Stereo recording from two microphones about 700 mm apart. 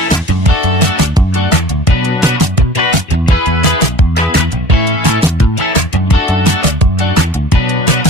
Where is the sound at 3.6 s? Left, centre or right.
Left.